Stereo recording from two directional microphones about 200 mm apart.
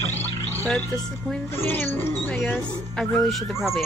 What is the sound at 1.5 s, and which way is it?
Speech, 10° left (ahead or behind).